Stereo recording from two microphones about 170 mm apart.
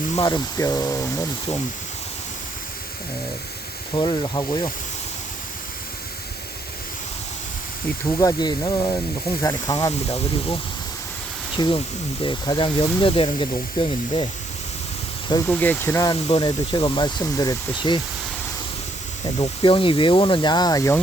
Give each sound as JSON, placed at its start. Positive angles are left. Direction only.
{"t": 0.2, "sound": "speech", "side_deg": 20}
{"t": 3.9, "sound": "speech", "side_deg": 25}
{"t": 8.2, "sound": "speech", "side_deg": 20}
{"t": 10.1, "sound": "speech", "side_deg": 35}
{"t": 15.4, "sound": "speech", "side_deg": 10}
{"t": 16.2, "sound": "speech", "side_deg": 30}
{"t": 19.4, "sound": "speech", "side_deg": 30}